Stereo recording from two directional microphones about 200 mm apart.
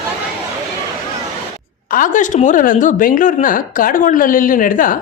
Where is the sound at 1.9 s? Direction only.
40° left (ahead or behind).